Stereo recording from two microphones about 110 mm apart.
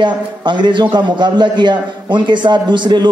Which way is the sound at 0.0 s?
45° right (ahead or behind).